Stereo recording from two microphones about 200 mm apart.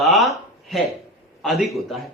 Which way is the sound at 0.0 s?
Centre (ahead or behind).